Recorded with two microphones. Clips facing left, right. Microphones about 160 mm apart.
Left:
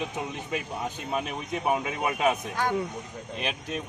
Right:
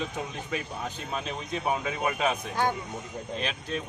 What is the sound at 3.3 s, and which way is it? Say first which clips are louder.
Speech: left 1 dB; 15° left (ahead or behind).